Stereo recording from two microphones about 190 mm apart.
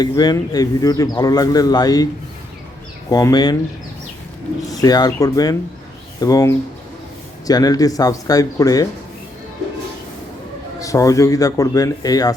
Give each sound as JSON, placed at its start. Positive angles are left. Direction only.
{"t": 0.0, "sound": "a man's voice", "side_deg": 20}
{"t": 3.1, "sound": "a man's voice", "side_deg": 20}
{"t": 4.7, "sound": "a man's voice", "side_deg": 20}
{"t": 10.8, "sound": "a man's voice", "side_deg": 15}